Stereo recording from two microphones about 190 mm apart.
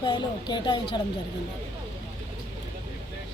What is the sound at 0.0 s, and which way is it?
A woman's voice, 25° left (ahead or behind).